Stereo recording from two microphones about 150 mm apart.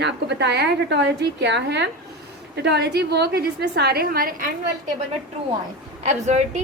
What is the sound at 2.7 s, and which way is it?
A woman's voice, 90° right.